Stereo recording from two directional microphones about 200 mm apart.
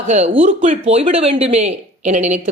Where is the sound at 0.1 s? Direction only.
35° right (ahead or behind).